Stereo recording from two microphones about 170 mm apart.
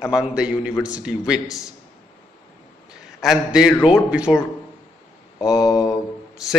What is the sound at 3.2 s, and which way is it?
A man's voice, 5° right (ahead or behind).